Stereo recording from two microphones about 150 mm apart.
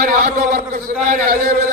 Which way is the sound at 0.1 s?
65° right (ahead or behind).